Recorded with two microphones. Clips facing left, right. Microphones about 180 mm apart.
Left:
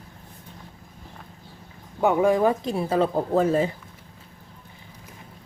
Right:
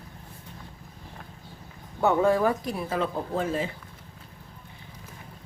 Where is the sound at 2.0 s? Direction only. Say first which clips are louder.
Left 2 dB; 15° left (ahead or behind); by 3.7 s 40° left (ahead or behind).